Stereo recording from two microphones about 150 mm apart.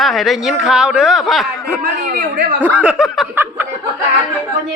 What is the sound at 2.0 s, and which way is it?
Speech, 90° right.